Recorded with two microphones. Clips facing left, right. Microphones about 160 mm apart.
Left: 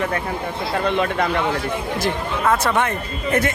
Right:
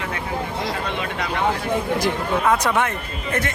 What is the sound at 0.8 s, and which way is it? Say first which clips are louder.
Speech: left 7 dB; 50° left (ahead or behind).